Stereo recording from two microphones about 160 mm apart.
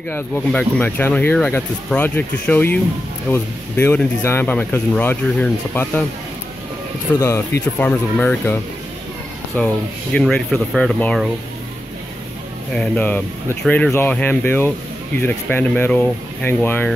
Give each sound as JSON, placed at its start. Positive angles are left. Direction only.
{"t": 0.1, "sound": "speech", "side_deg": 10}
{"t": 7.2, "sound": "speech", "side_deg": 15}
{"t": 12.7, "sound": "speech", "side_deg": 5}